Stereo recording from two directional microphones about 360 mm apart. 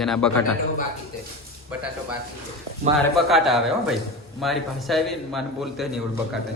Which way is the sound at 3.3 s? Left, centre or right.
Centre.